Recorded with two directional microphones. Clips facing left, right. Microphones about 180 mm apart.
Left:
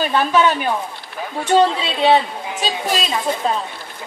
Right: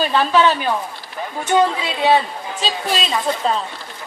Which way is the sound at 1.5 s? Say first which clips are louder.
Left 2 dB; 25° left (ahead or behind).